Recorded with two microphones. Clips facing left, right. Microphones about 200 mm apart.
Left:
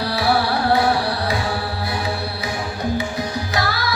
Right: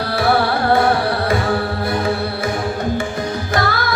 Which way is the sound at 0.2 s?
50° right (ahead or behind).